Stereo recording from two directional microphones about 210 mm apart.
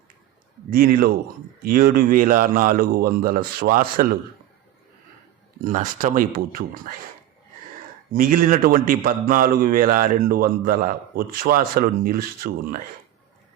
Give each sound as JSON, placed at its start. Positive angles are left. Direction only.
{"t": 0.7, "sound": "speech", "side_deg": -45}
{"t": 5.6, "sound": "a man's voice", "side_deg": -40}
{"t": 8.1, "sound": "a man's voice", "side_deg": -40}